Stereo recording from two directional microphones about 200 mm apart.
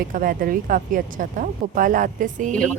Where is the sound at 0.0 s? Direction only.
45° right (ahead or behind).